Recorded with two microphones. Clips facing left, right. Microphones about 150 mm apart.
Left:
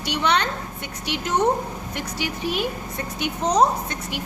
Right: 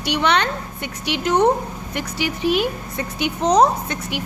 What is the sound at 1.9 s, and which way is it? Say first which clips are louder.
A woman's voice: right 5 dB; 90° right.